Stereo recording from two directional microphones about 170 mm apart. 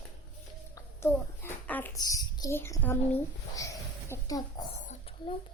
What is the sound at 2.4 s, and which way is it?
Speech, 15° left (ahead or behind).